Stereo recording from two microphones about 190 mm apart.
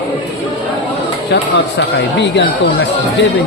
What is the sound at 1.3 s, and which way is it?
Speech, 65° left (ahead or behind).